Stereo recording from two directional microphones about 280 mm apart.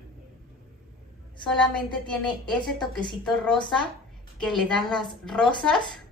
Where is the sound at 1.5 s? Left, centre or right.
Centre.